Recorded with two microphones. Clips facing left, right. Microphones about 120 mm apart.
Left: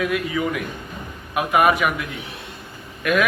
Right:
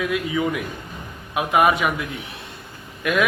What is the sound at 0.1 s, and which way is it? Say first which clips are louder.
A man's voice: even; 20° right (ahead or behind).